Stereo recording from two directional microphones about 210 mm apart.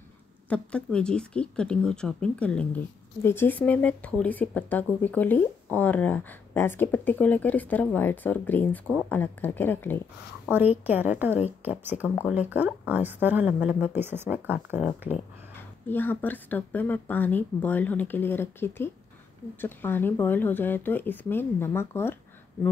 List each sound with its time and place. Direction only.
0.5 s speech: 5° left (ahead or behind)
10.9 s speech: 10° right (ahead or behind)
15.9 s speech: 10° left (ahead or behind)